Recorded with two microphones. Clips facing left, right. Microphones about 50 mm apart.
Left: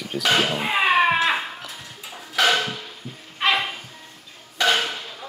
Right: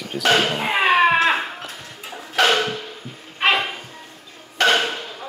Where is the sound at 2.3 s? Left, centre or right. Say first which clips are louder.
Right 2 dB; right.